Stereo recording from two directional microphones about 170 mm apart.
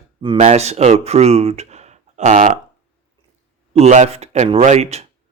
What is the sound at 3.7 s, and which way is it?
Speech, 40° right (ahead or behind).